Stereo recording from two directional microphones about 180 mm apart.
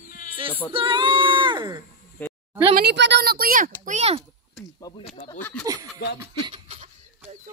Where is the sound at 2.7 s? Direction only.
70° right (ahead or behind); by 4.2 s 35° right (ahead or behind).